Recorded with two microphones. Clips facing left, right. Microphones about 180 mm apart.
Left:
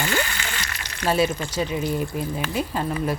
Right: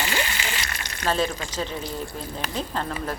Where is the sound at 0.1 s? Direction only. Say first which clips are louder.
Left 2 dB; 15° right (ahead or behind).